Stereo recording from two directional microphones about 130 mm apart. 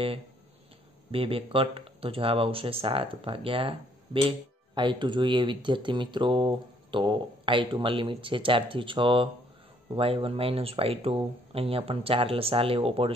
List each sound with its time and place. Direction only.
1.1 s speech: 45° right (ahead or behind)